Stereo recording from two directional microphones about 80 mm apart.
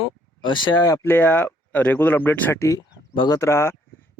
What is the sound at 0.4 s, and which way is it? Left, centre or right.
Speech, left.